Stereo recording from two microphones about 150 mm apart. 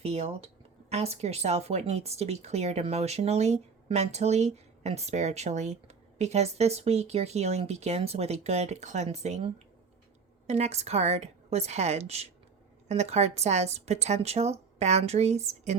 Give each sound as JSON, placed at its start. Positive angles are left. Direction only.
{"t": 0.0, "sound": "speech", "side_deg": -45}